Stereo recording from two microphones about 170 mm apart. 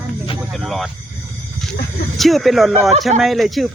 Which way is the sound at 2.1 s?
Centre (ahead or behind).